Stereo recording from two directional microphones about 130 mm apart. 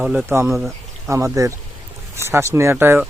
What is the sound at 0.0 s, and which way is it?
Speech, 5° right (ahead or behind).